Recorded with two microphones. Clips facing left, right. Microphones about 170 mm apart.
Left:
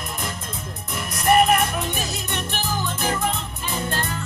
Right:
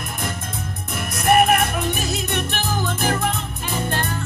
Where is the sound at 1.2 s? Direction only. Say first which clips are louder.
Right 1 dB; 60° right (ahead or behind).